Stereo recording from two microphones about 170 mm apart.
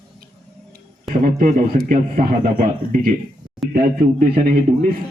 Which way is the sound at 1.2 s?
55° right (ahead or behind).